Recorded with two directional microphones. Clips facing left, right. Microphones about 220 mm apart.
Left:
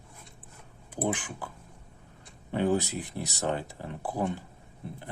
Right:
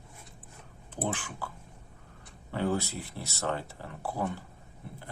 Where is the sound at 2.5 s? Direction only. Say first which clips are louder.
Left 4 dB; 15° left (ahead or behind).